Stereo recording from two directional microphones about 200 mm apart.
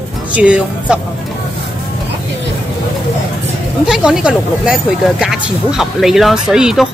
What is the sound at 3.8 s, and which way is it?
Speech, 5° right (ahead or behind).